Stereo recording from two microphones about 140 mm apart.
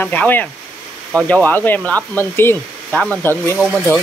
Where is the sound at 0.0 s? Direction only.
15° left (ahead or behind).